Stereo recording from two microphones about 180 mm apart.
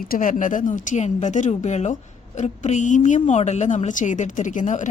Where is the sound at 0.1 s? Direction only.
45° left (ahead or behind).